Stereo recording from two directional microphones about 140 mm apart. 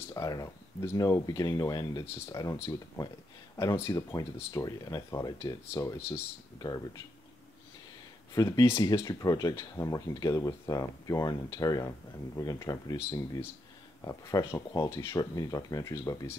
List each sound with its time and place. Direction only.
0.0 s speech: 25° left (ahead or behind)
8.4 s speech: 25° left (ahead or behind)